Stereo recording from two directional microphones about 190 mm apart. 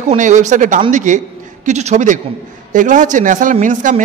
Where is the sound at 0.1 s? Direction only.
40° right (ahead or behind).